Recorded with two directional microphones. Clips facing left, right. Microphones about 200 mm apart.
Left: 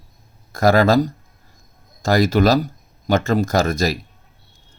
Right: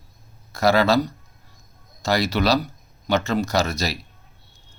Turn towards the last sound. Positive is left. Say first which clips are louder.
# left 5 dB
turn(degrees=50)  # may be behind; listen again after turning